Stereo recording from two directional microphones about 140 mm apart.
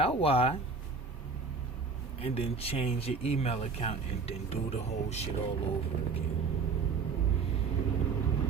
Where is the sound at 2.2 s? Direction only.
40° left (ahead or behind).